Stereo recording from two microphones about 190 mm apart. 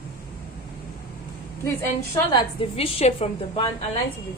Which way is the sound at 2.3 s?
30° left (ahead or behind).